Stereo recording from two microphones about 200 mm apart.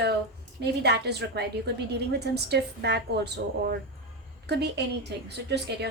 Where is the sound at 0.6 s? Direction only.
55° right (ahead or behind).